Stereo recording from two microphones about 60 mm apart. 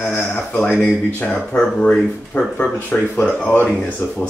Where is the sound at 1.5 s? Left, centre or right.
Centre.